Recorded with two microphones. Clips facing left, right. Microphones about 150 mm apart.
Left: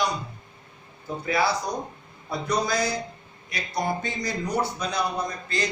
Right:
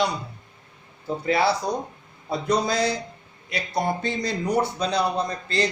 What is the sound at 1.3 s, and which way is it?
A man's voice, 30° right (ahead or behind).